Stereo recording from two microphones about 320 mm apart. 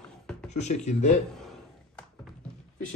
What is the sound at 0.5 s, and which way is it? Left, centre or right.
Speech, left.